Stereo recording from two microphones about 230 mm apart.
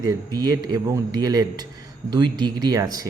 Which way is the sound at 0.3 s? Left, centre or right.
Centre.